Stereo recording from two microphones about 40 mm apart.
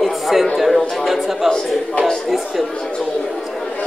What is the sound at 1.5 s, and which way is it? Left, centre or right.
Speech, centre.